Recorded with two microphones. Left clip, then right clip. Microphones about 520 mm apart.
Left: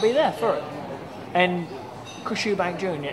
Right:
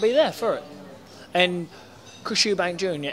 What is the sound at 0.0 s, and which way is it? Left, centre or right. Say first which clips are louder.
Speech: even; right.